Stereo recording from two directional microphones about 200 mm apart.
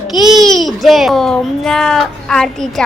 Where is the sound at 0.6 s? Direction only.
Centre (ahead or behind).